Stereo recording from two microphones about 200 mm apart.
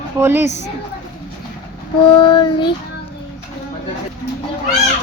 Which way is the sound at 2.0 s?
20° left (ahead or behind).